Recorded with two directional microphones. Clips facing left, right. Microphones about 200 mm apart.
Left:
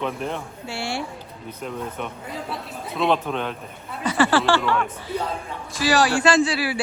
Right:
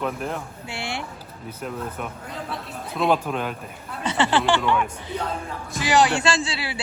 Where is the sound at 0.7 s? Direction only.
20° right (ahead or behind).